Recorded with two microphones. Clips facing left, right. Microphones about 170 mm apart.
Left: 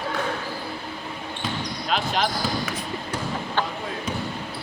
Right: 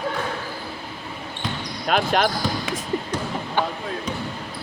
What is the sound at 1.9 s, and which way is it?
Speech, 55° right (ahead or behind).